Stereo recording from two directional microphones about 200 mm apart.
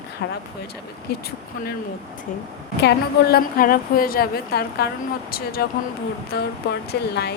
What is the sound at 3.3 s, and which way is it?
A woman's voice, 45° left (ahead or behind).